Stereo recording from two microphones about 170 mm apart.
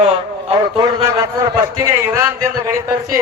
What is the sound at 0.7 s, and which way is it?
A man's voice, 20° right (ahead or behind).